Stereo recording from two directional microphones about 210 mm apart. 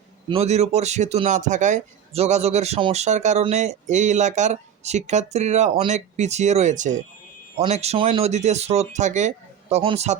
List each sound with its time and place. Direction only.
0.3 s speech: 30° right (ahead or behind)